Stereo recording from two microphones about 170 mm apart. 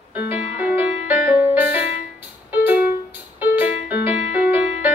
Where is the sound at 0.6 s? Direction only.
10° right (ahead or behind).